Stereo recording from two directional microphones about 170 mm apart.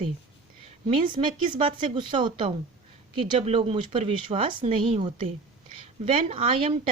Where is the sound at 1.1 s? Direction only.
30° right (ahead or behind).